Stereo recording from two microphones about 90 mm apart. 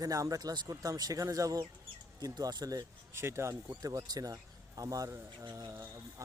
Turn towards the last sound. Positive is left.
turn(degrees=-35)  # may be behind; listen again after turning